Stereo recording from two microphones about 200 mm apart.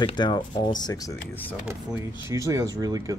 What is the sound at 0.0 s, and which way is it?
Speech, 20° left (ahead or behind).